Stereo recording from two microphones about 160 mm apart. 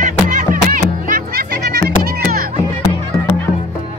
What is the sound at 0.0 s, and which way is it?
Music, 55° right (ahead or behind).